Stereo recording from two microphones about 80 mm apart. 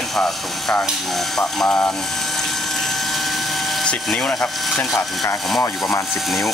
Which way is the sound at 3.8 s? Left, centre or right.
Centre.